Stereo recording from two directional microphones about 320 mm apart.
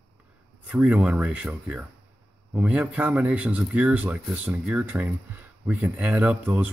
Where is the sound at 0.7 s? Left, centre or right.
Centre.